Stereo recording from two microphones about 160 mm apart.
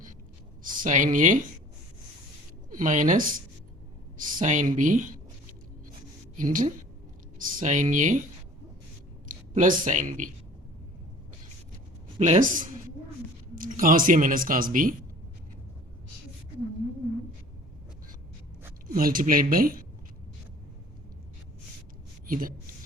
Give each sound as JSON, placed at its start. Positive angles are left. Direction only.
{"t": 0.6, "sound": "speech", "side_deg": -60}
{"t": 2.6, "sound": "speech", "side_deg": -55}
{"t": 4.4, "sound": "speech", "side_deg": -55}
{"t": 6.3, "sound": "a woman's voice", "side_deg": -55}
{"t": 9.3, "sound": "speech", "side_deg": -55}
{"t": 12.2, "sound": "speech", "side_deg": -50}
{"t": 18.9, "sound": "speech", "side_deg": -60}
{"t": 22.3, "sound": "speech", "side_deg": -60}